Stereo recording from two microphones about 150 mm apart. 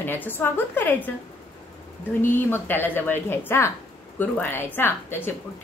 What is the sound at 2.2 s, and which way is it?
A woman's voice, 15° left (ahead or behind).